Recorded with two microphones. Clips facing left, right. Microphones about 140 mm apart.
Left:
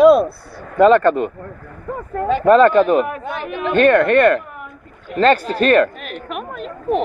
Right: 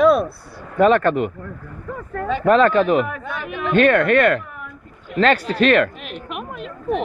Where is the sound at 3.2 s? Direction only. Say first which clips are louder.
Left 3 dB; 35° left (ahead or behind).